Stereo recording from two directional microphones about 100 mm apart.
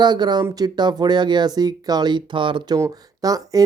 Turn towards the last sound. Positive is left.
turn(degrees=-35)  # may be behind; listen again after turning